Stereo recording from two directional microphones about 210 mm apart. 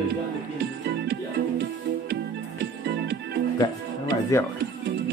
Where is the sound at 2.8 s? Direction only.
55° right (ahead or behind).